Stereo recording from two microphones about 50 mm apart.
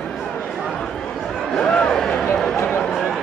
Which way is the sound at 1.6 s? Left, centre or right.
Centre.